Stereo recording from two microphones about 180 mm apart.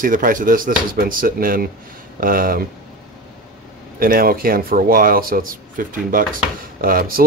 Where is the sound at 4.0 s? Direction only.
55° right (ahead or behind).